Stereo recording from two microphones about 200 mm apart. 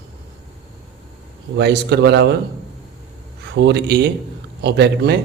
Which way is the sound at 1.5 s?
55° right (ahead or behind).